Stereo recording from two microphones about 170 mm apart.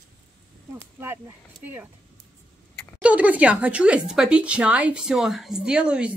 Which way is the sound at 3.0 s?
10° right (ahead or behind).